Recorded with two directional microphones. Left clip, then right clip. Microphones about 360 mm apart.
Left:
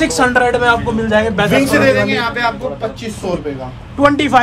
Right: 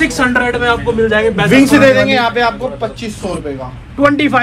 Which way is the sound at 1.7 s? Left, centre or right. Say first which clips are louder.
Right 4 dB; centre.